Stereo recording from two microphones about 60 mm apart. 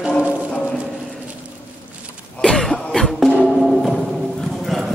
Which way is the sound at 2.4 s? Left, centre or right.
Centre.